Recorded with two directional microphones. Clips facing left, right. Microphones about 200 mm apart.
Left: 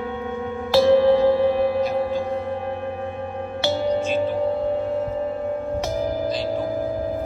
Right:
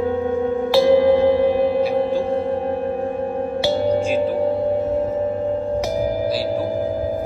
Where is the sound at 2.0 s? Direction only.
30° right (ahead or behind).